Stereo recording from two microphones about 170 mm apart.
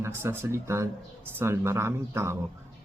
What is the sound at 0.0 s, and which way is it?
Speech, 15° right (ahead or behind).